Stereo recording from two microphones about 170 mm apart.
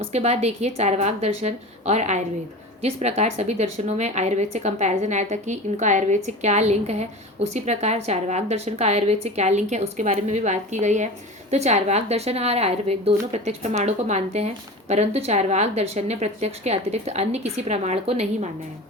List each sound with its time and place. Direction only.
0.0 s a woman's voice: 40° right (ahead or behind)